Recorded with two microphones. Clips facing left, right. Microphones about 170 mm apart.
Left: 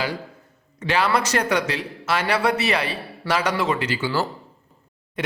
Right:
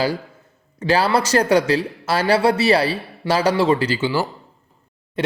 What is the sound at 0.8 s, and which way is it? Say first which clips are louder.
A man's voice: right 4 dB; 35° right (ahead or behind).